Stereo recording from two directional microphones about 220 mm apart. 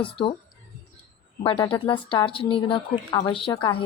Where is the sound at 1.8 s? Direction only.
20° left (ahead or behind).